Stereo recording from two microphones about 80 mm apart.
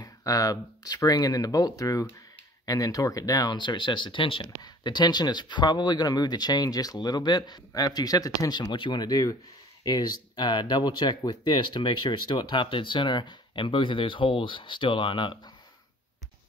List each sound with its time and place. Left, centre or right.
0.0 s speech: left